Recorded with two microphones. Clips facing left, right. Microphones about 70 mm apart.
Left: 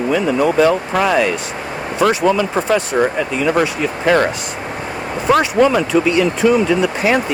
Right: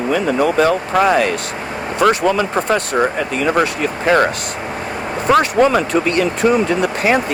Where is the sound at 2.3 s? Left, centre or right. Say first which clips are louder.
Left 1 dB; right.